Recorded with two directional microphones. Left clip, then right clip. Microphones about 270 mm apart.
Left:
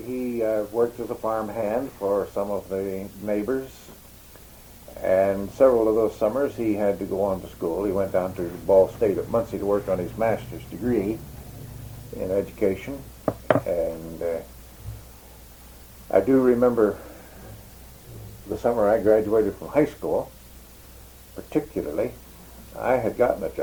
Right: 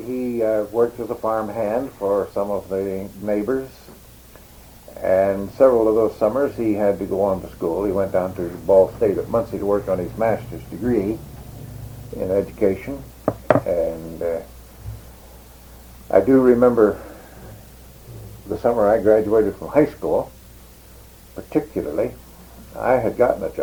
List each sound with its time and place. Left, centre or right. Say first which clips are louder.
0.1 s speech: right 4 dB; right
4.9 s speech: right 3 dB; right
16.0 s speech: right 5 dB; right
18.4 s speech: right 4 dB; right
21.3 s speech: right 4 dB; right